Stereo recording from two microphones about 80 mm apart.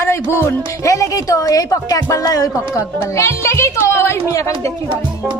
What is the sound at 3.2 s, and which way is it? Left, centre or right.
Speech, left.